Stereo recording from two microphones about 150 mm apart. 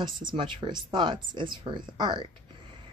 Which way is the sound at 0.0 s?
30° right (ahead or behind).